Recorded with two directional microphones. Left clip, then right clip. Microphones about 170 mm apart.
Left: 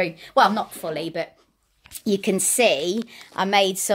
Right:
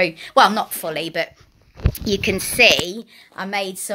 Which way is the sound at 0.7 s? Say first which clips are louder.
Right 4 dB; 15° right (ahead or behind).